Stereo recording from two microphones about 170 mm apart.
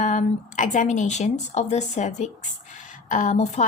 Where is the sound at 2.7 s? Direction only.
45° left (ahead or behind).